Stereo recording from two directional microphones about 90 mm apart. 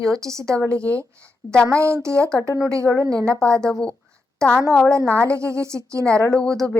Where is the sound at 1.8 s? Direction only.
30° right (ahead or behind).